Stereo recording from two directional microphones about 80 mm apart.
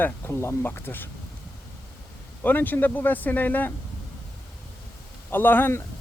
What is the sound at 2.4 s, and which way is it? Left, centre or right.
Speech, left.